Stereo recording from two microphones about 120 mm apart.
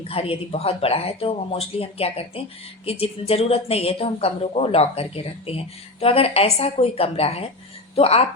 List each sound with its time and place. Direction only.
0.1 s speech: 55° left (ahead or behind)